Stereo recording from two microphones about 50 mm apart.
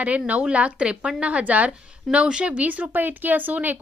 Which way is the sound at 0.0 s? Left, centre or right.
Right.